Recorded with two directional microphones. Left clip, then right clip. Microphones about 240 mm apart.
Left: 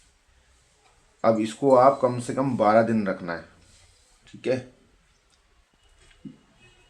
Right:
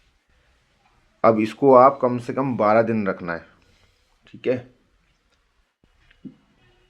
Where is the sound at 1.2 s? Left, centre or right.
Right.